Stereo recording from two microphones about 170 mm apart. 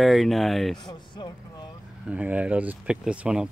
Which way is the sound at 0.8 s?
25° left (ahead or behind).